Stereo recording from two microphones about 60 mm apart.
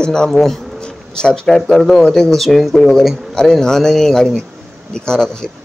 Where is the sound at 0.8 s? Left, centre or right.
Centre.